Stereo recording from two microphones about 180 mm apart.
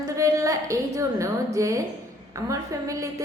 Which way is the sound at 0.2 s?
20° right (ahead or behind).